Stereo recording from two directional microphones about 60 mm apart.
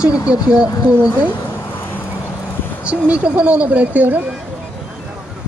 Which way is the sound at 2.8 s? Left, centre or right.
Centre.